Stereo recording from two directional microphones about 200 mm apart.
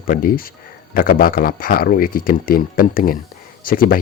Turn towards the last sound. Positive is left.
turn(degrees=45)  # may be behind; listen again after turning